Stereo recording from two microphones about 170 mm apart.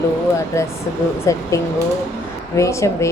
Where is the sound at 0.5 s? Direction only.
15° left (ahead or behind).